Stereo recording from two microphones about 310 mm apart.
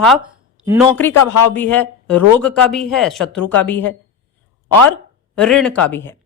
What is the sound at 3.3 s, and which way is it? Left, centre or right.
Speech, left.